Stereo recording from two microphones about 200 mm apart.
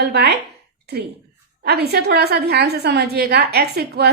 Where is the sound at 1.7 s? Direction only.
55° right (ahead or behind).